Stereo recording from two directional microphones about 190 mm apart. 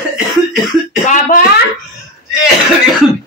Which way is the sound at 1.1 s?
45° left (ahead or behind).